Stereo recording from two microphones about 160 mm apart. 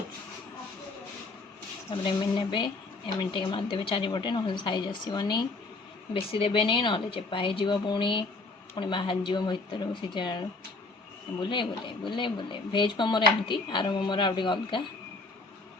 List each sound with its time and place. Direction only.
1.9 s speech: 35° left (ahead or behind)